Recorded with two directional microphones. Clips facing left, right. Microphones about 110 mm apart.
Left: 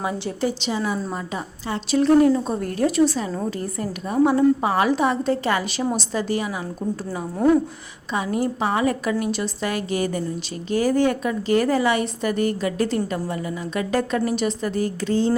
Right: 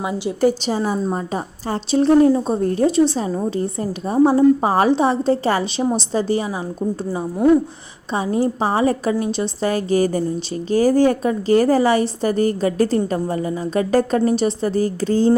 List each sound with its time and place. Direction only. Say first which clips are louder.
0.0 s a woman's voice: right 3 dB; 15° right (ahead or behind)
0.4 s a woman's voice: right 6 dB; 40° right (ahead or behind)
8.1 s a woman's voice: right 4 dB; 30° right (ahead or behind)